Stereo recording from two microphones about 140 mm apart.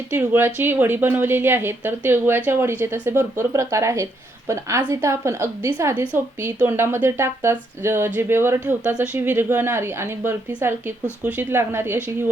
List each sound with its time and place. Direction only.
0.1 s speech: 15° right (ahead or behind)